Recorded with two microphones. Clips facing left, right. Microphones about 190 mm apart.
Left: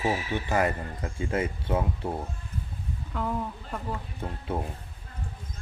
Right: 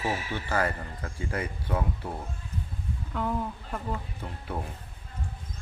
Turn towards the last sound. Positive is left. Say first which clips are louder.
# left 4 dB
turn(degrees=25)  # may be behind; listen again after turning